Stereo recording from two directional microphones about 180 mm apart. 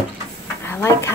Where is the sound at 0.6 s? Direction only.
15° left (ahead or behind).